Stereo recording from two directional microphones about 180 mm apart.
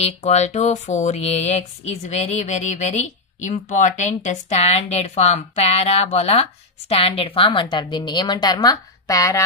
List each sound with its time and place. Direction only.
0.0 s a woman's voice: 40° left (ahead or behind); by 9.4 s 20° left (ahead or behind)